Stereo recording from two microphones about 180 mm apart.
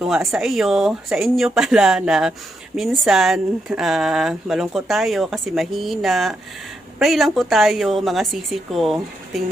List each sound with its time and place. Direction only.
0.0 s speech: centre (ahead or behind)